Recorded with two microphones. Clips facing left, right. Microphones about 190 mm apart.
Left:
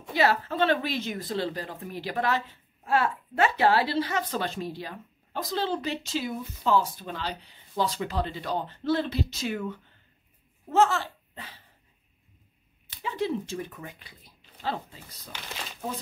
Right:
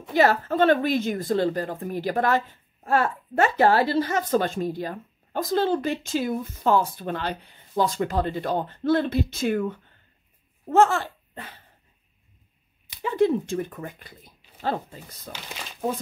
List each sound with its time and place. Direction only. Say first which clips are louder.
0.1 s a woman's voice: right 4 dB; 45° right (ahead or behind)
13.0 s a woman's voice: right 8 dB; 50° right (ahead or behind)